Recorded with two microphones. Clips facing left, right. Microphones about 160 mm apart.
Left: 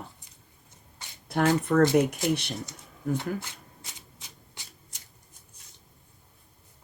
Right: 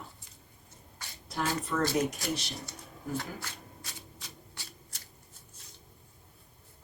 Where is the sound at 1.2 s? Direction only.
60° left (ahead or behind).